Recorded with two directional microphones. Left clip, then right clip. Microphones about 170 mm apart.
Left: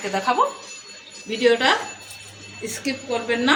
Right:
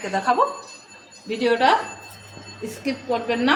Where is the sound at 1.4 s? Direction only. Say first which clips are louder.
Left 1 dB; 45° right (ahead or behind).